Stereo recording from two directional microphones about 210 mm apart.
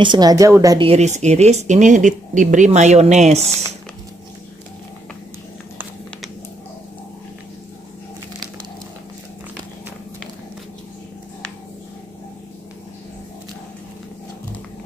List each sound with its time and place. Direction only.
0.0 s a woman's voice: 20° right (ahead or behind)
0.8 s speech: 30° right (ahead or behind)